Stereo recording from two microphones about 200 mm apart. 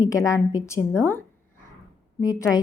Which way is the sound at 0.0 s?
15° left (ahead or behind).